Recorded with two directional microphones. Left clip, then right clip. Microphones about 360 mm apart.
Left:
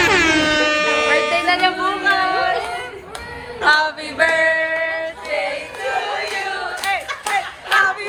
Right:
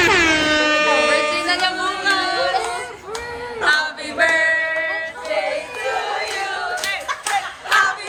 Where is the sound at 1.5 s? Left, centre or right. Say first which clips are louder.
Left 2 dB; centre.